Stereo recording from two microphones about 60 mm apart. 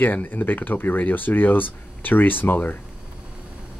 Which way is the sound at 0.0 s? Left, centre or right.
Left.